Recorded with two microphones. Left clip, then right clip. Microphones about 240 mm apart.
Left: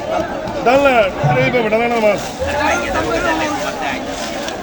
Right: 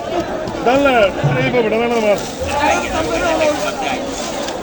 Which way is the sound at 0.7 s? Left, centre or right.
Left.